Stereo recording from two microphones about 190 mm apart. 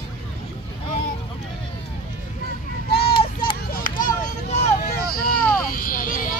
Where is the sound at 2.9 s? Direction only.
55° left (ahead or behind).